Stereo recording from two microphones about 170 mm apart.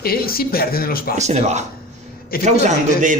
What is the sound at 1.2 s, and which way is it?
A man's voice, 40° right (ahead or behind).